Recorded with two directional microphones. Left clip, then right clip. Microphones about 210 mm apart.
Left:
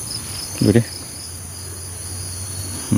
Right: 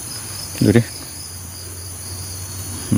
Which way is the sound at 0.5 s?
15° right (ahead or behind).